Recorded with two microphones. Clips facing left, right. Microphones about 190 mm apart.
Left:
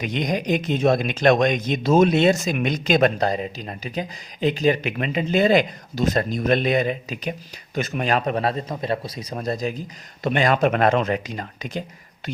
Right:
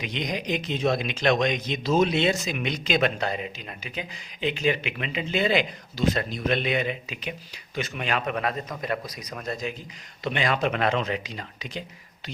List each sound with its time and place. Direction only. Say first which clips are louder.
0.0 s a man's voice: left 6 dB; 50° left (ahead or behind)